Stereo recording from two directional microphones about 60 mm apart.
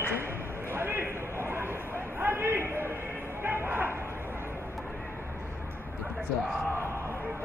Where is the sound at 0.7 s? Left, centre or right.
Right.